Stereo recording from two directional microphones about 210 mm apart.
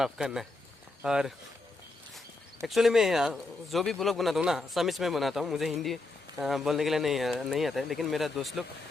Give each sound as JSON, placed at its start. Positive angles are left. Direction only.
{"t": 0.0, "sound": "speech", "side_deg": 0}